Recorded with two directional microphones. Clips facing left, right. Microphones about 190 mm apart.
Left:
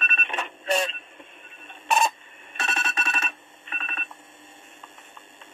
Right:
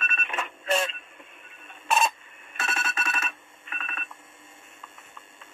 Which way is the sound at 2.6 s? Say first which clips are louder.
Left 1 dB; 30° left (ahead or behind).